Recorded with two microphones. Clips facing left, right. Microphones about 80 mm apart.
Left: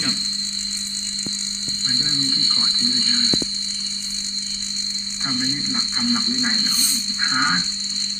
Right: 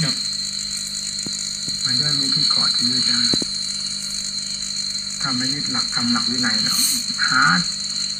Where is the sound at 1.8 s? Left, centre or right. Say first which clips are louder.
Even; centre.